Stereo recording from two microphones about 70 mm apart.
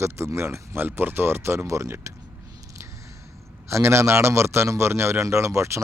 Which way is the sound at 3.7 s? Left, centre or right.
Right.